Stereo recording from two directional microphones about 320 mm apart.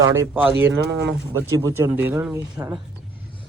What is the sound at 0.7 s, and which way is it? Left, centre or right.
Speech, right.